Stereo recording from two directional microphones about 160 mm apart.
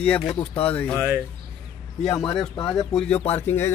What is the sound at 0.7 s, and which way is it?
Speech, 10° left (ahead or behind).